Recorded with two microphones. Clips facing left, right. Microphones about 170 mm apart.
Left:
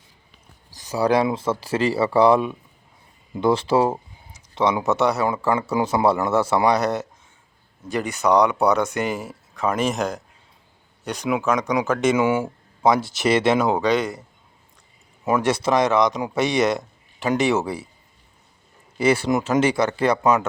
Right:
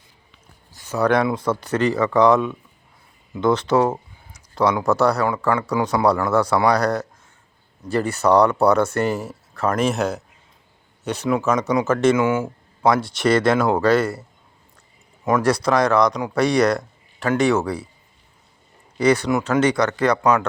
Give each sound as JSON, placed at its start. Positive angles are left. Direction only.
{"t": 0.9, "sound": "speech", "side_deg": 30}
{"t": 1.9, "sound": "speech", "side_deg": 10}
{"t": 3.5, "sound": "speech", "side_deg": 30}
{"t": 9.6, "sound": "speech", "side_deg": 0}
{"t": 12.1, "sound": "speech", "side_deg": 15}
{"t": 12.9, "sound": "speech", "side_deg": 0}
{"t": 15.4, "sound": "speech", "side_deg": 25}
{"t": 18.9, "sound": "speech", "side_deg": 25}
{"t": 20.1, "sound": "speech", "side_deg": 10}